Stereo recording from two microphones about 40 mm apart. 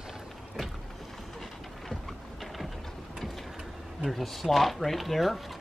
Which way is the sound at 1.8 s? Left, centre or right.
Centre.